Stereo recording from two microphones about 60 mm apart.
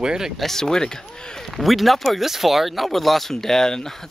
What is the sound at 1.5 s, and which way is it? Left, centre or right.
Speech, centre.